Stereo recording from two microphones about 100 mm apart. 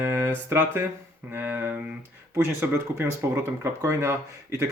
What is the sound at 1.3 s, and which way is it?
Speech, 20° right (ahead or behind).